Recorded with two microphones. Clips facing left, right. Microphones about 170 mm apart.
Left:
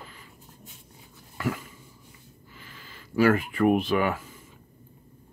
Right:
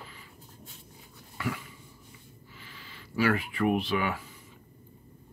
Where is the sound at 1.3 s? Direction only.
45° left (ahead or behind).